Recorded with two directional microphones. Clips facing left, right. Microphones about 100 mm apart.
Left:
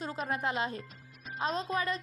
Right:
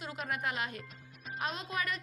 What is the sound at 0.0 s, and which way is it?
Speech, 35° left (ahead or behind).